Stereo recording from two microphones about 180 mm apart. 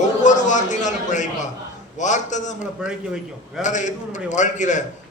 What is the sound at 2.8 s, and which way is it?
Speech, 5° right (ahead or behind).